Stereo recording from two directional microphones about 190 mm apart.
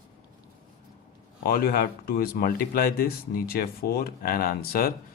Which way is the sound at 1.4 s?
50° left (ahead or behind).